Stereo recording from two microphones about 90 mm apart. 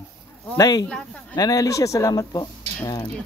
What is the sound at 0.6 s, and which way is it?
Speech, 50° left (ahead or behind).